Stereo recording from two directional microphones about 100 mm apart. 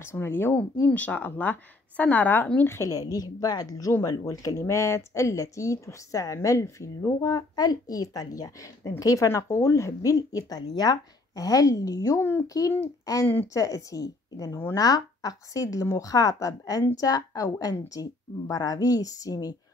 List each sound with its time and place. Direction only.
0.0 s speech: 25° left (ahead or behind)
12.2 s a child's voice: 25° left (ahead or behind)
13.0 s speech: 35° left (ahead or behind)